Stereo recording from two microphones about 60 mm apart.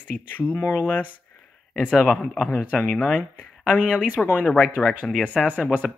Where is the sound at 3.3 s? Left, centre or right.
Left.